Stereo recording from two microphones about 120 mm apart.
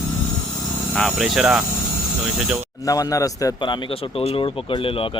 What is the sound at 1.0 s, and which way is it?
Speech, centre (ahead or behind).